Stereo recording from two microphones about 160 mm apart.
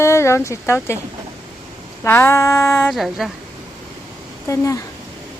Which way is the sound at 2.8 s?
Centre (ahead or behind).